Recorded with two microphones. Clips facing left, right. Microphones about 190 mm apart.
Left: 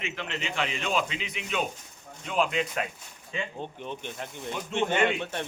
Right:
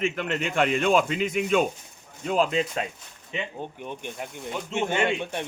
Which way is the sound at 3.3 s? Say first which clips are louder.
Right 2 dB; 15° right (ahead or behind).